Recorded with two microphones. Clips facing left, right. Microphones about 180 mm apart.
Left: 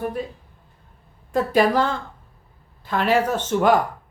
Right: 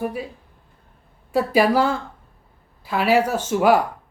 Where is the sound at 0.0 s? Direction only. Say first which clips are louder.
Even; 10° right (ahead or behind).